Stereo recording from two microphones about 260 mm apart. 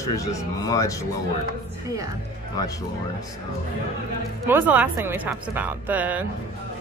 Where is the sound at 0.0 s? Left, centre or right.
Centre.